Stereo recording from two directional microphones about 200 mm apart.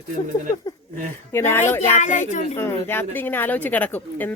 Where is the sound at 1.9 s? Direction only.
35° left (ahead or behind).